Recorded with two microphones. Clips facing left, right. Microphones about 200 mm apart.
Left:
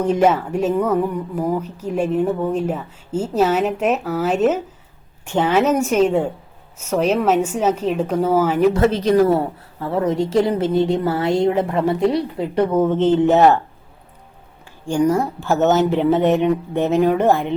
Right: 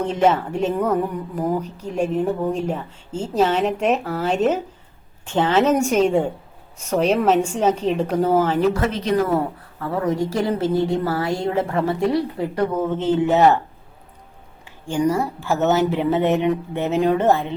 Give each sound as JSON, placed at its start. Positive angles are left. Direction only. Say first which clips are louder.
{"t": 0.0, "sound": "speech", "louder": "left 2 dB", "side_deg": 10}
{"t": 5.2, "sound": "speech", "louder": "left 1 dB", "side_deg": 15}
{"t": 8.7, "sound": "a woman's voice", "louder": "left 5 dB", "side_deg": 30}
{"t": 15.1, "sound": "speech", "louder": "left 3 dB", "side_deg": 15}
{"t": 15.4, "sound": "speech", "louder": "left 3 dB", "side_deg": -10}
{"t": 17.1, "sound": "speech", "louder": "left 1 dB", "side_deg": 10}